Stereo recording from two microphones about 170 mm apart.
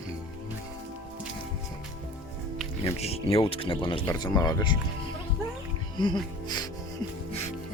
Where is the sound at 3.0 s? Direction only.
35° left (ahead or behind).